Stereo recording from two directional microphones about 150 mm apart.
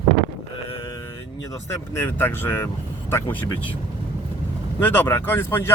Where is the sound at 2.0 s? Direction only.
15° left (ahead or behind).